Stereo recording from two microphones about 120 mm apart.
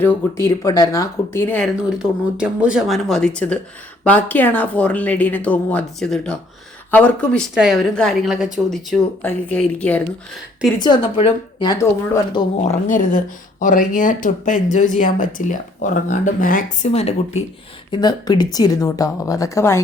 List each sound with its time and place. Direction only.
0.0 s speech: 20° left (ahead or behind)
1.6 s speech: 5° right (ahead or behind)
7.5 s speech: 5° right (ahead or behind)
9.2 s speech: 10° left (ahead or behind)
10.8 s speech: 35° left (ahead or behind)
12.5 s speech: 90° left
16.8 s speech: 60° left (ahead or behind)
17.9 s speech: 35° left (ahead or behind)